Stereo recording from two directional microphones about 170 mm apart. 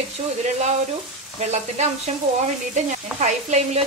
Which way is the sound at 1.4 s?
40° right (ahead or behind).